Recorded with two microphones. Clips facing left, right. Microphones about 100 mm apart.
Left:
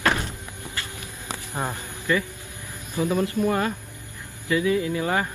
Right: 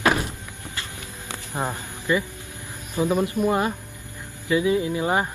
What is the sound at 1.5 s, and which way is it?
Speech, 15° right (ahead or behind).